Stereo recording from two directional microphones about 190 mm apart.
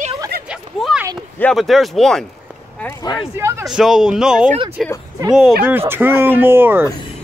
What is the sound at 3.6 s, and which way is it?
Speech, centre (ahead or behind).